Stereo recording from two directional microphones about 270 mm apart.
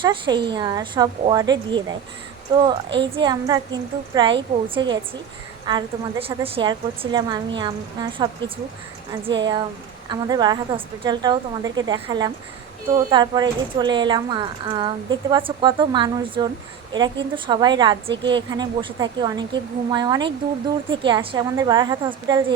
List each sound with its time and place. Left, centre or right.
0.0 s speech: centre